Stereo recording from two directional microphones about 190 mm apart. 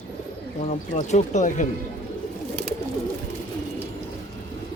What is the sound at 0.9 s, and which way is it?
Speech, 35° left (ahead or behind).